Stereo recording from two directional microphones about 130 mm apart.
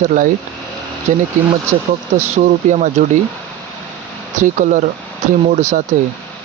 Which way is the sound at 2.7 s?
70° right (ahead or behind).